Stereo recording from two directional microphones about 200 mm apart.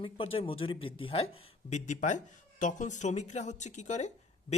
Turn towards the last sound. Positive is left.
turn(degrees=35)  # may be behind; listen again after turning